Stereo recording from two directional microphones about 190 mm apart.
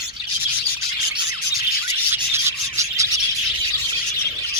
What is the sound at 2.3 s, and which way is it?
Bird, 15° right (ahead or behind).